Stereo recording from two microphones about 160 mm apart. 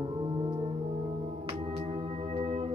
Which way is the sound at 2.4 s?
40° right (ahead or behind).